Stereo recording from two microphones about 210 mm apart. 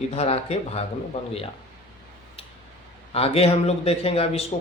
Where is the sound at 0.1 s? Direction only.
30° left (ahead or behind).